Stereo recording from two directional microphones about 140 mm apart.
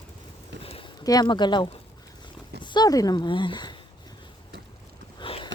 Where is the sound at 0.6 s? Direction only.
45° left (ahead or behind).